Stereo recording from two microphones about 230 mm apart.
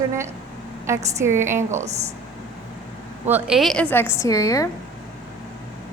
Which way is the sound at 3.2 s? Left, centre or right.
Centre.